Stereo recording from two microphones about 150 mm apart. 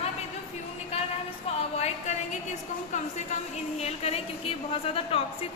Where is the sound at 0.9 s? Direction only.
45° left (ahead or behind).